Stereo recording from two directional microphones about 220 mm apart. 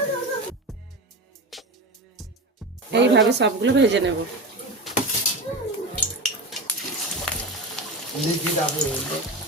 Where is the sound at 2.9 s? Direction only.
50° right (ahead or behind).